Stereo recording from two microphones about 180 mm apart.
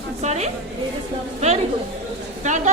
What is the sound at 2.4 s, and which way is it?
Speech, 40° right (ahead or behind).